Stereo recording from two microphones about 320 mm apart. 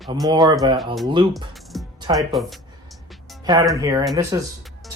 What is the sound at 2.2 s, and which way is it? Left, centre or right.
Speech, centre.